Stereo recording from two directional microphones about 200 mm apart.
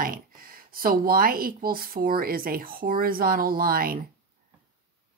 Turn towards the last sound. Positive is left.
turn(degrees=-45)  # may be behind; listen again after turning